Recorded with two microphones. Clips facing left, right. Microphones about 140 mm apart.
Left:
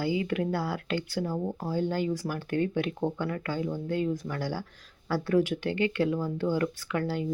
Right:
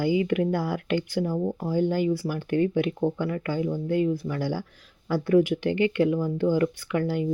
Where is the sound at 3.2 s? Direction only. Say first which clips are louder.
Right 4 dB; 40° left (ahead or behind).